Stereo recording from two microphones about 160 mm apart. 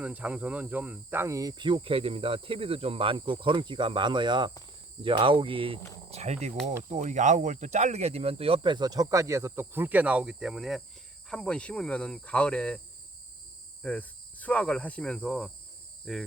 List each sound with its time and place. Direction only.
0.0 s speech: 10° right (ahead or behind); by 12.8 s 5° left (ahead or behind)
13.8 s cricket: 10° left (ahead or behind)
16.1 s insect: 5° left (ahead or behind)